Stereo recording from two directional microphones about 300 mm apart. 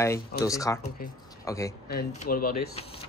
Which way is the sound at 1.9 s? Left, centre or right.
Left.